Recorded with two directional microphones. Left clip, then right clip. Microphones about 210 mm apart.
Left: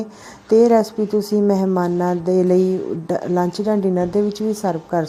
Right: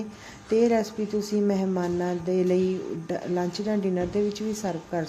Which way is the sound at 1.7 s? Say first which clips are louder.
Left 8 dB; 10° left (ahead or behind).